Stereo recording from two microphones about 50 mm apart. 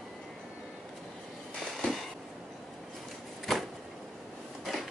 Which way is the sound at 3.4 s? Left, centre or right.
Centre.